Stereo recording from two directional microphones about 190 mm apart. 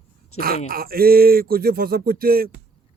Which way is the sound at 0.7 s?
50° right (ahead or behind).